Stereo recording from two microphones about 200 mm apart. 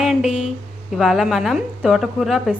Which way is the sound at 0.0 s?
Centre (ahead or behind).